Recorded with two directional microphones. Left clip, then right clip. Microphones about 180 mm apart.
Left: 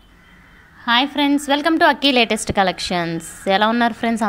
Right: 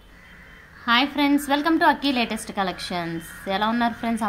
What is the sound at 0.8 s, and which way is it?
A woman's voice, 30° left (ahead or behind).